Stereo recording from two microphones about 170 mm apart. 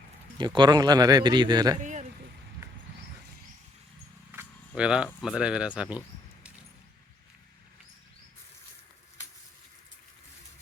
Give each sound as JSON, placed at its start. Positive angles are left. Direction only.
{"t": 0.3, "sound": "speech", "side_deg": -25}
{"t": 1.8, "sound": "boat", "side_deg": -45}
{"t": 4.3, "sound": "a sound", "side_deg": -10}
{"t": 5.2, "sound": "speech", "side_deg": -5}